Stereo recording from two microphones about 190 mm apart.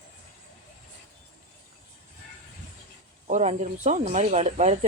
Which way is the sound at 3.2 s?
35° right (ahead or behind).